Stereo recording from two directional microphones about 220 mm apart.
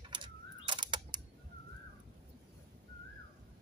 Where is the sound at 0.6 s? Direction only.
20° right (ahead or behind).